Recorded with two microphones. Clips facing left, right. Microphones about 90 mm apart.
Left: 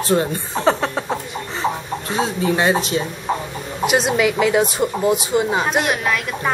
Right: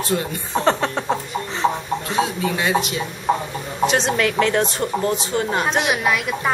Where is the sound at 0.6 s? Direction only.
Centre (ahead or behind).